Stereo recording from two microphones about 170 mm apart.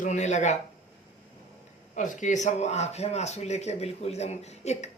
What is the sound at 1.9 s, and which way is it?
A man's voice, 50° left (ahead or behind).